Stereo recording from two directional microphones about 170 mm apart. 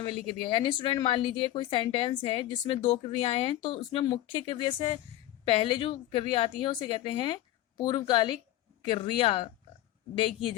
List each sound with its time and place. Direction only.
0.0 s a woman's voice: 30° left (ahead or behind)